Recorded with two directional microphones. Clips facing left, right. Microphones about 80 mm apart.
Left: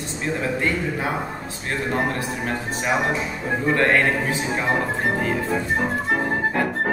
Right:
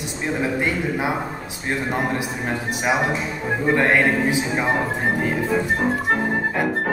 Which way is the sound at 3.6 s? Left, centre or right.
Centre.